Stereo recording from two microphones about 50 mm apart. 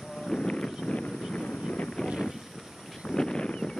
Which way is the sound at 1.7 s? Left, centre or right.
Centre.